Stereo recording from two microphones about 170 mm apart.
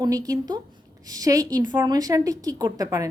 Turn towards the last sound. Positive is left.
turn(degrees=-20)  # may be behind; listen again after turning